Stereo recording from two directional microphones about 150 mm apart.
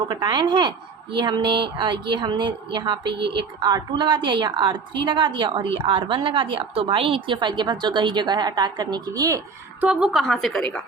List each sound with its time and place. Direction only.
0.1 s a woman's voice: 30° right (ahead or behind)
9.8 s a woman's voice: 5° right (ahead or behind)